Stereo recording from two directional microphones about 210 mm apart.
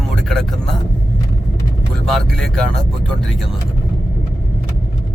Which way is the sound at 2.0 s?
Centre (ahead or behind).